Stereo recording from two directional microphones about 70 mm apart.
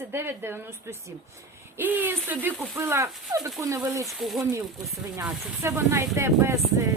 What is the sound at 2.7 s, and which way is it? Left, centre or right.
Speech, right.